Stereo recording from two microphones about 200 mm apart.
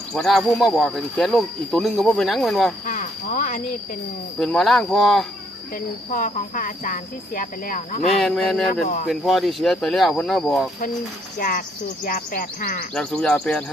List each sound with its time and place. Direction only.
0.1 s speech: centre (ahead or behind)
2.8 s cricket: 40° left (ahead or behind)
4.4 s speech: centre (ahead or behind)
6.1 s speech: 40° left (ahead or behind)
8.2 s speech: centre (ahead or behind)
11.3 s speech: 45° left (ahead or behind)
12.9 s speech: 5° left (ahead or behind)